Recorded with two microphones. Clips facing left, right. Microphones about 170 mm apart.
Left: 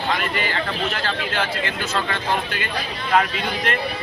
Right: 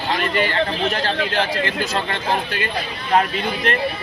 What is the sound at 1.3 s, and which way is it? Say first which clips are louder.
Speech: right 3 dB; 35° right (ahead or behind).